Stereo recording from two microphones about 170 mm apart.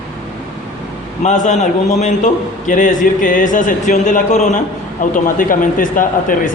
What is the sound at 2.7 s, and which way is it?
Speech, 50° left (ahead or behind).